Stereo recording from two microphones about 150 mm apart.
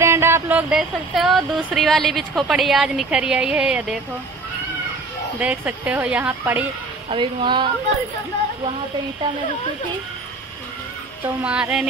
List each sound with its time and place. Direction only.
0.0 s a woman's voice: 15° right (ahead or behind)
5.4 s speech: 10° right (ahead or behind)
7.1 s a woman's voice: 35° right (ahead or behind)
11.4 s speech: 5° right (ahead or behind)